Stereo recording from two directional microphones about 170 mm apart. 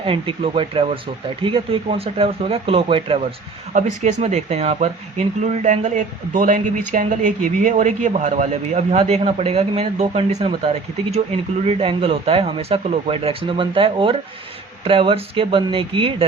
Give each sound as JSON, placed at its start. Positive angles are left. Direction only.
{"t": 0.0, "sound": "speech", "side_deg": -35}